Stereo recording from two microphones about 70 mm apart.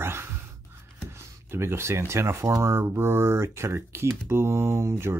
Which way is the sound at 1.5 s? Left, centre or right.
Right.